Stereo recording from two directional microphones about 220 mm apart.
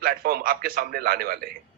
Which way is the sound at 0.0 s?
45° right (ahead or behind).